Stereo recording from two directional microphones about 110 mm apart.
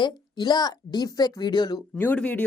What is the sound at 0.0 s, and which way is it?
Speech, 45° left (ahead or behind).